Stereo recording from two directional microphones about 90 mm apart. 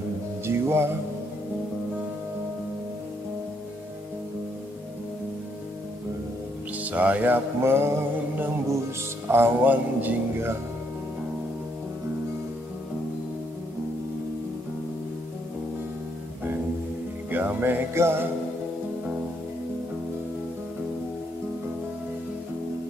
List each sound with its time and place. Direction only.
0.5 s music: 30° right (ahead or behind)
6.8 s music: 15° right (ahead or behind)
17.3 s music: 20° right (ahead or behind)